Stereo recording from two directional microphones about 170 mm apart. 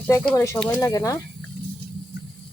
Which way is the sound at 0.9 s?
20° left (ahead or behind).